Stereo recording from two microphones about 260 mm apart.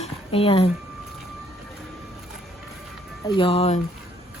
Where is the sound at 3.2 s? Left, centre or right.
Centre.